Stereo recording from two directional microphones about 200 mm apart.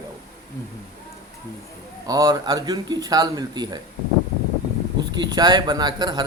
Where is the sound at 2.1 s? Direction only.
20° right (ahead or behind).